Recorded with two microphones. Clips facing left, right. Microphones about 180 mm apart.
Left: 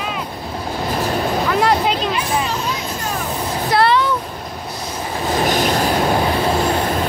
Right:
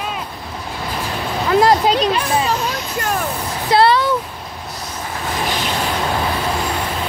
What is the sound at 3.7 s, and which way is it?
Music, 30° right (ahead or behind).